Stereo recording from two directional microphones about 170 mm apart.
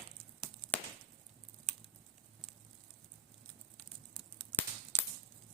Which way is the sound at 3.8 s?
Centre (ahead or behind).